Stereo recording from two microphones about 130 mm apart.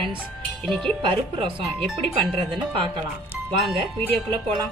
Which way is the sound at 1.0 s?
40° right (ahead or behind).